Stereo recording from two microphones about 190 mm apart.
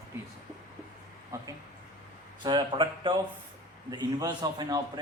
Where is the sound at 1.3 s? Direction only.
15° right (ahead or behind).